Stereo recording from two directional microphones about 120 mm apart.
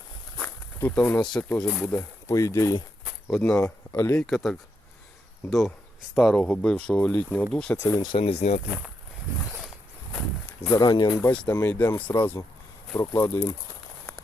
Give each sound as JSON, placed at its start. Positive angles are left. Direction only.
{"t": 0.3, "sound": "a sound", "side_deg": 10}
{"t": 1.5, "sound": "speech", "side_deg": 10}
{"t": 2.2, "sound": "speech", "side_deg": 25}
{"t": 3.2, "sound": "speech", "side_deg": 10}
{"t": 4.3, "sound": "speech", "side_deg": 0}
{"t": 8.0, "sound": "speech", "side_deg": 50}
{"t": 10.1, "sound": "a sound", "side_deg": 5}
{"t": 10.7, "sound": "speech", "side_deg": 30}
{"t": 11.2, "sound": "speech", "side_deg": 15}
{"t": 13.0, "sound": "speech", "side_deg": 25}